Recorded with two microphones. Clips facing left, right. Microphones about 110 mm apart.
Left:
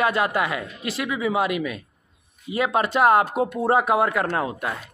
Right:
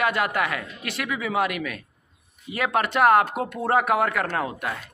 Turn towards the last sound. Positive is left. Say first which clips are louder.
# left 2 dB
turn(degrees=20)  # may be behind; listen again after turning